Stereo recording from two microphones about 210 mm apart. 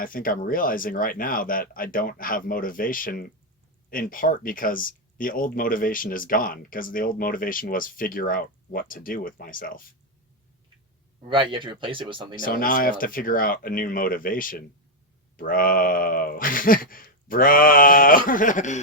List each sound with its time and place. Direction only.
0.0 s speech: 40° left (ahead or behind)
11.2 s speech: 25° right (ahead or behind)
12.5 s speech: 45° left (ahead or behind)